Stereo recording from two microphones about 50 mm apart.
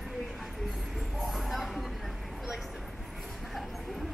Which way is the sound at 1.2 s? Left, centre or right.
Centre.